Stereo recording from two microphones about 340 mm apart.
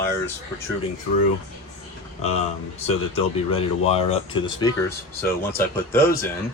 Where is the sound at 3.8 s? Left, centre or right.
Centre.